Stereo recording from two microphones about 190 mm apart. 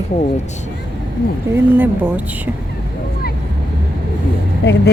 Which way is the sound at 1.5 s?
10° right (ahead or behind).